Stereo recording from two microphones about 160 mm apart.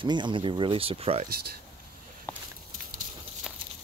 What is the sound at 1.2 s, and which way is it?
Speech, 70° right (ahead or behind).